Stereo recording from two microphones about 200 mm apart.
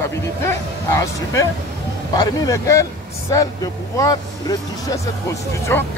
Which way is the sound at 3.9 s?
15° left (ahead or behind).